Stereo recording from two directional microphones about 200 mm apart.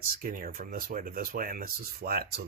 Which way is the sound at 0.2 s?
45° right (ahead or behind).